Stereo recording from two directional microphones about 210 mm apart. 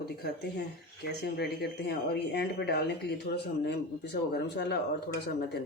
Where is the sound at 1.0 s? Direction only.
50° left (ahead or behind).